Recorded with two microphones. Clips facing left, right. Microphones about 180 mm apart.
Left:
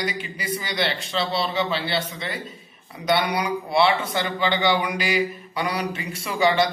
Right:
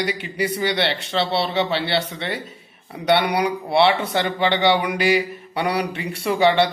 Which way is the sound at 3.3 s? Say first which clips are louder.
Right 3 dB; 65° right (ahead or behind).